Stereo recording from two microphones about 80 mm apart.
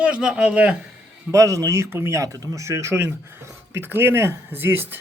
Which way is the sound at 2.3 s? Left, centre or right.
Right.